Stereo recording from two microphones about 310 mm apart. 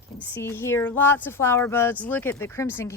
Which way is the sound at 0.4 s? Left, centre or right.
Centre.